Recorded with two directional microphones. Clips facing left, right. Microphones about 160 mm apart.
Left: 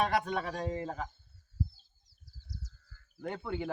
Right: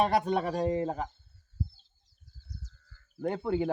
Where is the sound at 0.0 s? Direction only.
40° right (ahead or behind).